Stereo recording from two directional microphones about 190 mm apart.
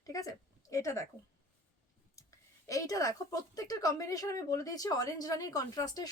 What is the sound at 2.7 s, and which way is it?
A woman's voice, 15° left (ahead or behind).